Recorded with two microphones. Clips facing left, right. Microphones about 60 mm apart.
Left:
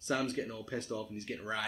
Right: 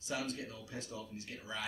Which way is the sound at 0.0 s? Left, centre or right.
Left.